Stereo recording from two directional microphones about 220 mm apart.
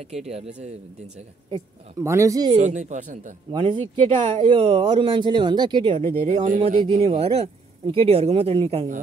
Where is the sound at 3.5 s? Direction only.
25° right (ahead or behind).